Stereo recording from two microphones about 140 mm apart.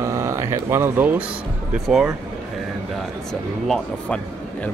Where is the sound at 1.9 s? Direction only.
5° right (ahead or behind).